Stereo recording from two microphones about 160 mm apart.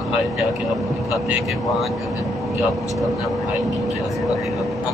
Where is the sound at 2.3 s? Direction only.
Centre (ahead or behind).